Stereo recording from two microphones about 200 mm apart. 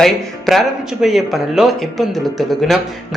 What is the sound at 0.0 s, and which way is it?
Speech, centre (ahead or behind).